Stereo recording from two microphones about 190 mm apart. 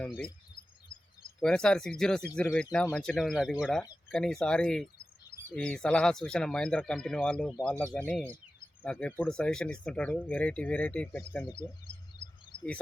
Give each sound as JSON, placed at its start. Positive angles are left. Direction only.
{"t": 1.4, "sound": "speech", "side_deg": 5}
{"t": 11.4, "sound": "speech", "side_deg": 25}